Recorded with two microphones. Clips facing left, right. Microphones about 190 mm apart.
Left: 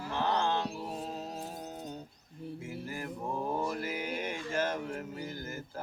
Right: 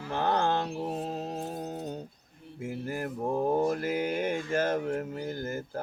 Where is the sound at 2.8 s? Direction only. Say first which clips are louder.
Right 8 dB; 50° right (ahead or behind).